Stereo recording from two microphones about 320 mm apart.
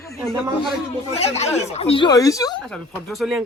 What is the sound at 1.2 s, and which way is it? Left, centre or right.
Speech, centre.